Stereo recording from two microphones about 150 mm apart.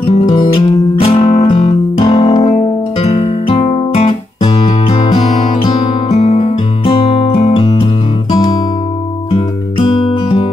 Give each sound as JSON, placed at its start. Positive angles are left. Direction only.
{"t": 0.0, "sound": "music", "side_deg": 45}
{"t": 0.3, "sound": "music", "side_deg": 30}
{"t": 2.3, "sound": "guitar", "side_deg": 45}
{"t": 4.6, "sound": "music", "side_deg": 40}
{"t": 7.6, "sound": "music", "side_deg": 30}